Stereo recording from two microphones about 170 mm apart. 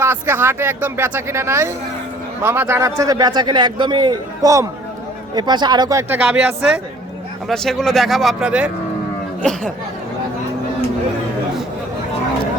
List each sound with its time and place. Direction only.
0.0 s a man's voice: 15° right (ahead or behind)
9.4 s speech: 5° left (ahead or behind)